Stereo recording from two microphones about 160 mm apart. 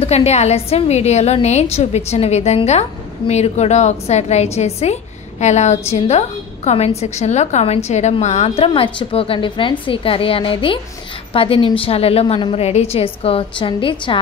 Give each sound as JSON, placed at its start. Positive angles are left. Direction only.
{"t": 0.0, "sound": "a woman's voice", "side_deg": 40}